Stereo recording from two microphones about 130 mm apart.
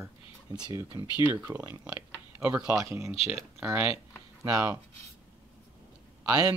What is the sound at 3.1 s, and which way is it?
Speech, 50° left (ahead or behind).